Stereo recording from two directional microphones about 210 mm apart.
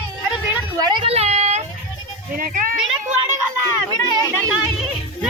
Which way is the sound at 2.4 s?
40° right (ahead or behind).